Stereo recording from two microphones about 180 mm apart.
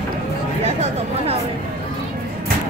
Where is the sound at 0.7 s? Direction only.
35° right (ahead or behind).